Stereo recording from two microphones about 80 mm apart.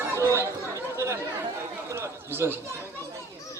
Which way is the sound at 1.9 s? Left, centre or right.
Right.